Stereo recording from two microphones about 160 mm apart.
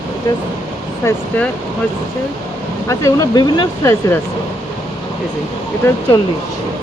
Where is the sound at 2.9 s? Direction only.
20° left (ahead or behind).